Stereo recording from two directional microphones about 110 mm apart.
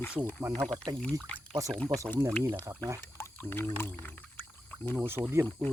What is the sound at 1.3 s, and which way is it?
Speech, 15° left (ahead or behind).